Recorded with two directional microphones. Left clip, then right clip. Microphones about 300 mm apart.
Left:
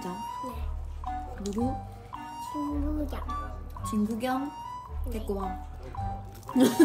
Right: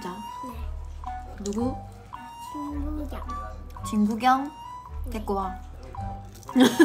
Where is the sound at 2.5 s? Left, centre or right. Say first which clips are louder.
Left 1 dB; centre.